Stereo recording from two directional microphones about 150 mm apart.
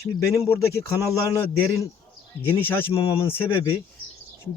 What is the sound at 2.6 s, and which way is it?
Speech, 15° left (ahead or behind).